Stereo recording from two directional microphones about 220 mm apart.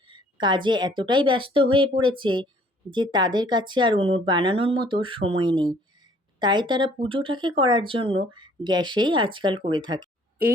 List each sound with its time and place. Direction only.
0.1 s speech: 20° right (ahead or behind)